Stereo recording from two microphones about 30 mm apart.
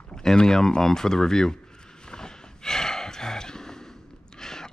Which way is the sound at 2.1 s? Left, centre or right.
Left.